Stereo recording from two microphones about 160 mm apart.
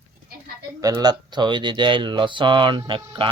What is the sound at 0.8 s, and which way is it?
Speech, 25° right (ahead or behind).